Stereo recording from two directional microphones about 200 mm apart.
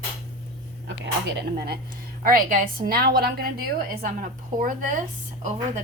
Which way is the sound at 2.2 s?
45° right (ahead or behind).